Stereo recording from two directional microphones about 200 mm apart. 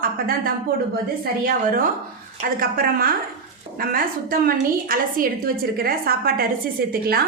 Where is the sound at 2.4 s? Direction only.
45° right (ahead or behind).